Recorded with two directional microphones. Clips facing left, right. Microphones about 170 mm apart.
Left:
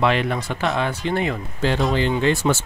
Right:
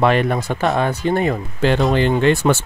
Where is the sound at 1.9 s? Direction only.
55° right (ahead or behind).